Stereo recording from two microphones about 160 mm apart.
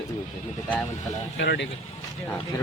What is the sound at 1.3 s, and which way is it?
Speech, 90° left.